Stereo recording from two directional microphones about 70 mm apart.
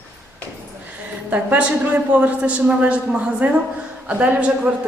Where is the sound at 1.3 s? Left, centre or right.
Right.